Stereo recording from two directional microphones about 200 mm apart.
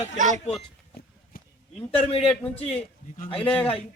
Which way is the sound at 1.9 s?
30° left (ahead or behind).